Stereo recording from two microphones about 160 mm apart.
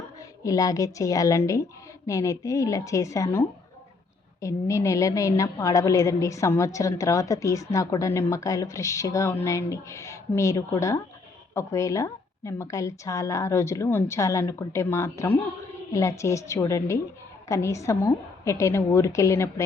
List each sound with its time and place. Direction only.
0.4 s a woman's voice: 20° left (ahead or behind)